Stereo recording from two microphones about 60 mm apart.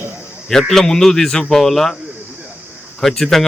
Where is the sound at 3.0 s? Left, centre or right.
Centre.